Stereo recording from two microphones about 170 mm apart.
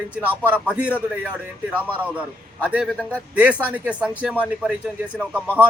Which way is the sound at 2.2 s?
5° right (ahead or behind).